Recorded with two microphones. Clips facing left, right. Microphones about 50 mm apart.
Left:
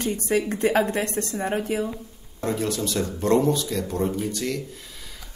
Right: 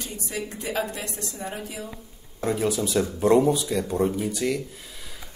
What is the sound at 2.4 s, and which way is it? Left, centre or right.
Speech, centre.